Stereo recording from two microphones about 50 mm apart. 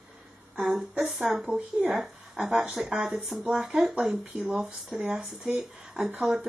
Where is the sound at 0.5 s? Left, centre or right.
Centre.